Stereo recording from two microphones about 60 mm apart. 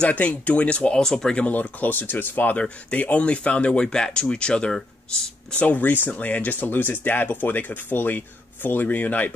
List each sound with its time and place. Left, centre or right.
0.0 s speech: left
1.5 s speech: left; by 4.8 s centre
5.5 s speech: left